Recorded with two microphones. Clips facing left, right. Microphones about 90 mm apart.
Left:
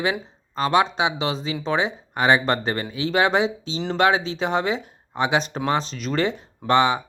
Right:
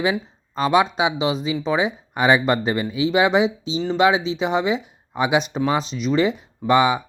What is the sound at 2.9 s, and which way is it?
Speech, 35° left (ahead or behind).